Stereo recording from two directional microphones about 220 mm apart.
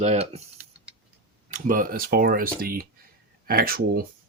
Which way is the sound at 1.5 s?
40° right (ahead or behind).